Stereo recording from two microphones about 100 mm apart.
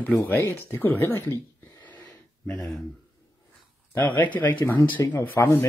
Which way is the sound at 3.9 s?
20° left (ahead or behind).